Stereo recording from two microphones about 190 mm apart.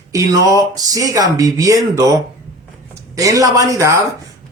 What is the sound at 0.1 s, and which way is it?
A man's voice, 20° right (ahead or behind).